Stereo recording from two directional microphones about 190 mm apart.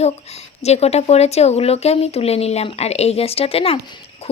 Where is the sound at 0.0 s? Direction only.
35° left (ahead or behind).